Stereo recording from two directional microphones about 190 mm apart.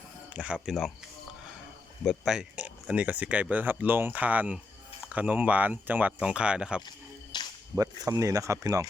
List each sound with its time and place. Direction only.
0.3 s speech: 5° right (ahead or behind)
2.0 s speech: 5° right (ahead or behind)
7.3 s music: 20° left (ahead or behind)
7.8 s speech: 20° right (ahead or behind)